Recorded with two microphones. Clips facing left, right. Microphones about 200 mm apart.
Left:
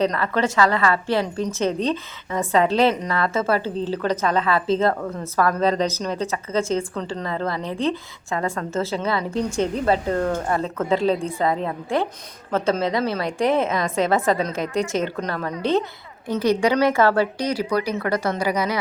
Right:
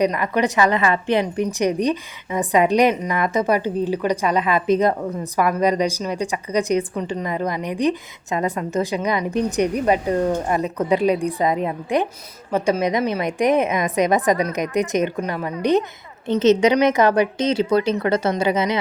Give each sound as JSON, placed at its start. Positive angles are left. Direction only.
{"t": 0.0, "sound": "a woman's voice", "side_deg": -15}